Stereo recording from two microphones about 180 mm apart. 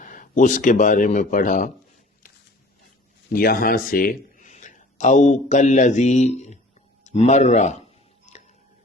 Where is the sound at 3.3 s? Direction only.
55° left (ahead or behind).